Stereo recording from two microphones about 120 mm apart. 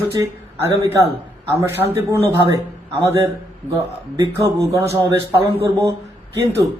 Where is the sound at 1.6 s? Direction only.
20° right (ahead or behind).